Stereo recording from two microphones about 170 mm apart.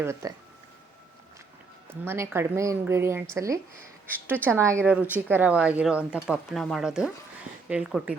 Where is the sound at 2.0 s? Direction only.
15° right (ahead or behind).